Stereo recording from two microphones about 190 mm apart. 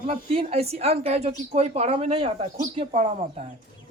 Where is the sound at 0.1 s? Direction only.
35° right (ahead or behind).